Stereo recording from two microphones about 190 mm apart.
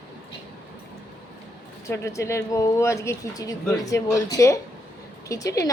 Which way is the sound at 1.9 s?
15° left (ahead or behind).